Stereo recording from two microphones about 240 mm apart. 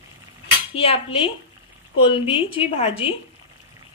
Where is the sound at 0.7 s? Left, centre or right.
Left.